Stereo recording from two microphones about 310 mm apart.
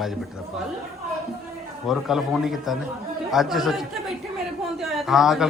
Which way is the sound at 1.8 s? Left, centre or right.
Centre.